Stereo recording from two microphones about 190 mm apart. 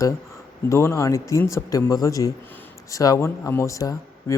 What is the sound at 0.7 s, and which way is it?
A man's voice, 15° left (ahead or behind).